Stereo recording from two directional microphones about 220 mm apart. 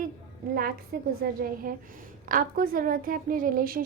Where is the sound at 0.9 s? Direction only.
45° right (ahead or behind).